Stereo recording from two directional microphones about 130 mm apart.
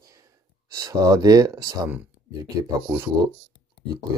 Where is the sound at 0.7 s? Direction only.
30° right (ahead or behind).